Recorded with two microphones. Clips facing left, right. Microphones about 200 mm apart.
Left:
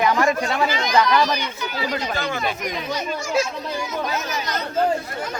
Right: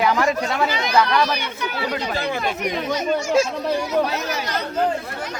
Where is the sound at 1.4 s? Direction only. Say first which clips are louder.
Right 1 dB; 60° right (ahead or behind).